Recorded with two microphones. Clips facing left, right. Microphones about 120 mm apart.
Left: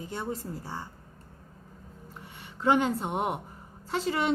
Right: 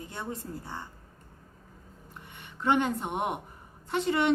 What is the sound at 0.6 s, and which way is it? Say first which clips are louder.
Speech: left 2 dB; 10° left (ahead or behind).